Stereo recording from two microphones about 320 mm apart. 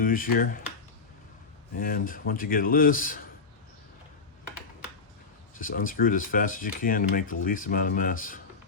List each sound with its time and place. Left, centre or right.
0.0 s speech: left
1.7 s speech: left
5.5 s speech: left